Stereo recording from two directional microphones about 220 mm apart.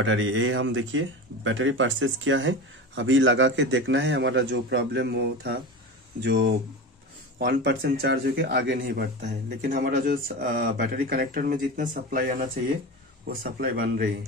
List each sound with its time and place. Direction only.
0.0 s speech: 60° right (ahead or behind); by 14.1 s 40° right (ahead or behind)